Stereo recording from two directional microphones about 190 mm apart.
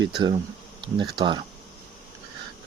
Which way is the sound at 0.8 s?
25° right (ahead or behind).